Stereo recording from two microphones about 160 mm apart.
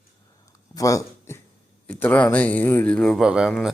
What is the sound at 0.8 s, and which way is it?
Speech, 20° left (ahead or behind).